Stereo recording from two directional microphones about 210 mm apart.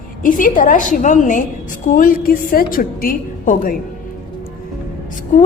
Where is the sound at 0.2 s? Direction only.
40° left (ahead or behind).